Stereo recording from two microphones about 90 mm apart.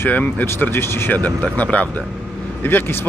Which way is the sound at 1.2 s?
15° left (ahead or behind).